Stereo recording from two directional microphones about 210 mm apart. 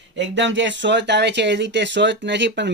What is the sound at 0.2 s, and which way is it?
Speech, 60° right (ahead or behind).